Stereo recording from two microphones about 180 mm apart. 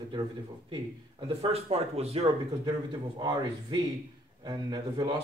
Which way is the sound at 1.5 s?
35° right (ahead or behind).